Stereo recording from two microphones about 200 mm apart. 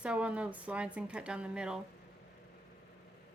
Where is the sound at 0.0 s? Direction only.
5° right (ahead or behind).